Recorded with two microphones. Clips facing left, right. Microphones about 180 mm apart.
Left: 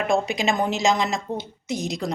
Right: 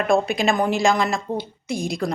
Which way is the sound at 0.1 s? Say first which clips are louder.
Right 4 dB; 20° left (ahead or behind).